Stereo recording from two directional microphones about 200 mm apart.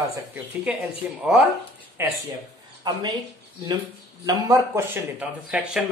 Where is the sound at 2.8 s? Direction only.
20° right (ahead or behind).